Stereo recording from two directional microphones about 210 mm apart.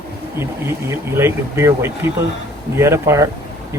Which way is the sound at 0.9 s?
10° right (ahead or behind).